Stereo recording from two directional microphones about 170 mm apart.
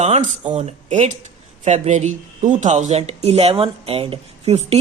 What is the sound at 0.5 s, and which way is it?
Speech, 40° right (ahead or behind).